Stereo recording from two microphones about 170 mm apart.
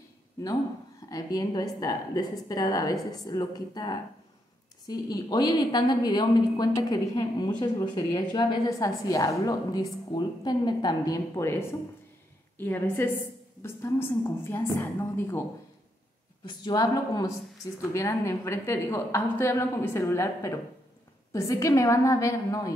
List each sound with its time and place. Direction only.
1.0 s a woman's voice: 20° left (ahead or behind)
16.4 s a woman's voice: 25° left (ahead or behind)